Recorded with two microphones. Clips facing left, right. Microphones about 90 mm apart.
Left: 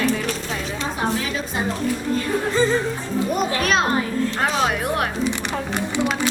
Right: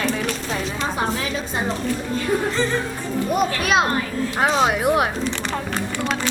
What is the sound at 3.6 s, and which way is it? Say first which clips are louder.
Speech: even; 5° right (ahead or behind).